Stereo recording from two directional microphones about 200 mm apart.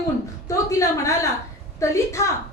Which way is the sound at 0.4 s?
15° left (ahead or behind).